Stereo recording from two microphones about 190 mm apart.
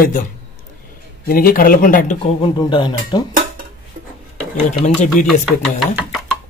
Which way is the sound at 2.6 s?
25° left (ahead or behind).